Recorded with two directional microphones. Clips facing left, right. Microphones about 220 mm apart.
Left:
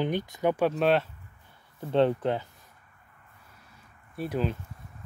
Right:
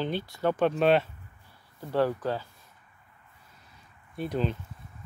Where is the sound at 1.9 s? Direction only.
25° left (ahead or behind).